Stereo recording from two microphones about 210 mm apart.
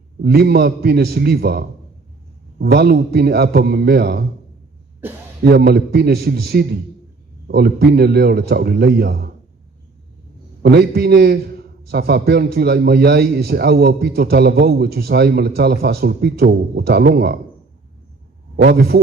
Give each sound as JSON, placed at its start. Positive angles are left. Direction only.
{"t": 0.2, "sound": "a man's voice", "side_deg": -50}
{"t": 5.4, "sound": "a man's voice", "side_deg": -50}
{"t": 10.6, "sound": "a man's voice", "side_deg": -50}
{"t": 18.5, "sound": "a man's voice", "side_deg": -50}